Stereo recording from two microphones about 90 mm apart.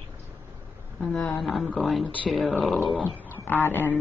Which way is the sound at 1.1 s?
15° left (ahead or behind).